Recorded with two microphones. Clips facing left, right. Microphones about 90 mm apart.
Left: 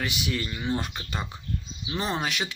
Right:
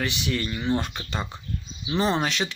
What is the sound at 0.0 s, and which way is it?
Speech, 10° left (ahead or behind).